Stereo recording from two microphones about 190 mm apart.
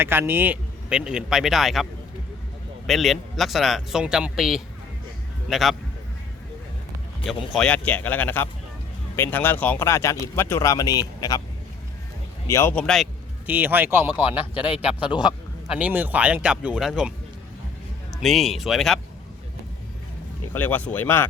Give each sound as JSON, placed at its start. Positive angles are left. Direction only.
{"t": 0.0, "sound": "speech", "side_deg": -10}
{"t": 7.3, "sound": "a man's voice", "side_deg": 0}
{"t": 12.5, "sound": "speech", "side_deg": 15}
{"t": 13.5, "sound": "speech", "side_deg": -10}
{"t": 15.0, "sound": "a man's voice", "side_deg": 25}
{"t": 15.6, "sound": "speech", "side_deg": -5}
{"t": 18.2, "sound": "speech", "side_deg": 0}
{"t": 20.5, "sound": "speech", "side_deg": 10}